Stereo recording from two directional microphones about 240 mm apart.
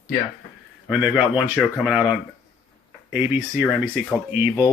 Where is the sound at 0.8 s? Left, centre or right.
Centre.